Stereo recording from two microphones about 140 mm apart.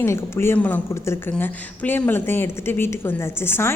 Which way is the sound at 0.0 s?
20° left (ahead or behind).